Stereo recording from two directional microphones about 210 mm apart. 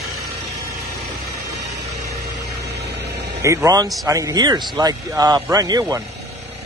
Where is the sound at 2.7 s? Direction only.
55° right (ahead or behind).